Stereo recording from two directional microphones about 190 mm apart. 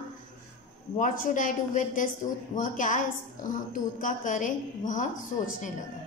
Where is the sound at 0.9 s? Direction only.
45° left (ahead or behind).